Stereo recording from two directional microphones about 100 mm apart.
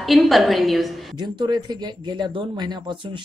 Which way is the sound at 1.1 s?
45° right (ahead or behind).